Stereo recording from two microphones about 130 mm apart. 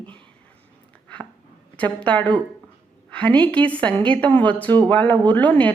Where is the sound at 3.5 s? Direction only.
10° left (ahead or behind).